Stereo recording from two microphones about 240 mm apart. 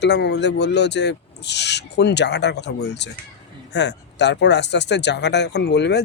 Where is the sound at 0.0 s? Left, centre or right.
Left.